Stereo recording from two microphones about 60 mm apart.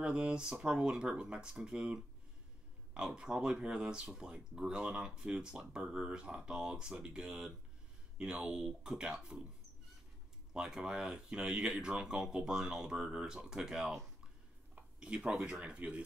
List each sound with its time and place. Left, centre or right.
0.0 s speech: centre
10.5 s speech: centre
14.8 s a sound: right
15.6 s speech: centre